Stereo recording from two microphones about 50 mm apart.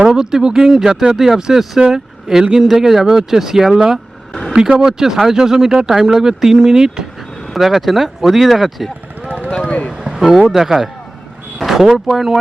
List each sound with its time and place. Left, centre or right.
0.0 s speech: centre
4.3 s vehicle: centre
4.5 s speech: centre
7.4 s speech: centre
9.5 s a sound: left
9.9 s boat: centre
10.5 s speech: centre